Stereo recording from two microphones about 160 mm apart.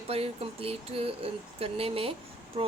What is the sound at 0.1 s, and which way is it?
Speech, 40° right (ahead or behind).